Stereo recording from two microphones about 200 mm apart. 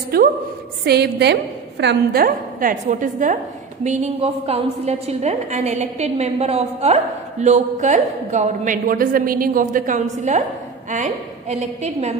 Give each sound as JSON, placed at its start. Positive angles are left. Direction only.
{"t": 0.1, "sound": "a woman's voice", "side_deg": -50}